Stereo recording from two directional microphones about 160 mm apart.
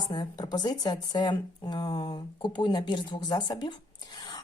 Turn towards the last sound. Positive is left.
turn(degrees=25)  # may be behind; listen again after turning